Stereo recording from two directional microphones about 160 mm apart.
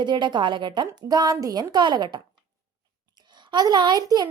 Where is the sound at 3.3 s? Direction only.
30° right (ahead or behind).